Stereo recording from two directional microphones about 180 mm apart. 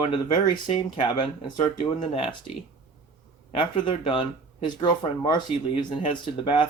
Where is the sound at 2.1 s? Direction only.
35° left (ahead or behind).